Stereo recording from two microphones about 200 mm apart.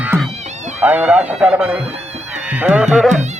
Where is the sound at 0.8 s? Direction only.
5° right (ahead or behind).